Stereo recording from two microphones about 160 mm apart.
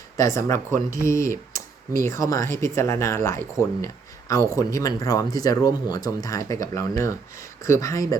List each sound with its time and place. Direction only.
0.2 s speech: 20° left (ahead or behind)